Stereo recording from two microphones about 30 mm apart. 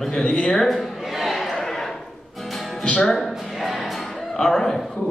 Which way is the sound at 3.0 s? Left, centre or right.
Centre.